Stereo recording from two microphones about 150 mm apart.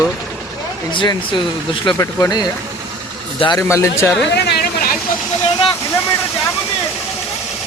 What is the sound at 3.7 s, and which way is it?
Speech, 20° left (ahead or behind).